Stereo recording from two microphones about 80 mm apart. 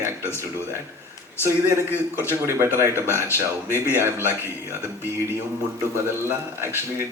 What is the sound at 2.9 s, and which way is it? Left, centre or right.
Speech, left.